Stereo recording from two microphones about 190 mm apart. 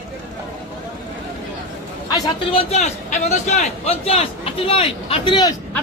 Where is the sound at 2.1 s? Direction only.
30° left (ahead or behind).